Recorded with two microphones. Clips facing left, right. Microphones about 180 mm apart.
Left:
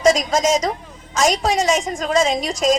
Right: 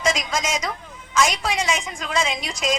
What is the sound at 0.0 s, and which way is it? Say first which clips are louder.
A woman's voice: left 8 dB; 40° left (ahead or behind).